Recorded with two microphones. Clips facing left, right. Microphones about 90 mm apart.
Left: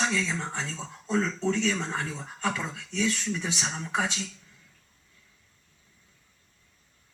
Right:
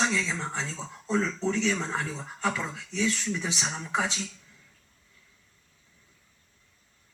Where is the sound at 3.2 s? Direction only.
5° right (ahead or behind).